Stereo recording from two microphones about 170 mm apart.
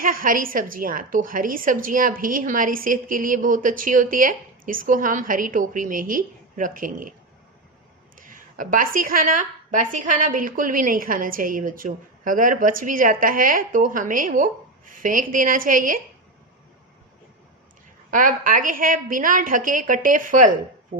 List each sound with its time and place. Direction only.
0.0 s a woman's voice: 55° right (ahead or behind)
8.2 s a woman's voice: 50° right (ahead or behind)
18.1 s a woman's voice: 50° right (ahead or behind)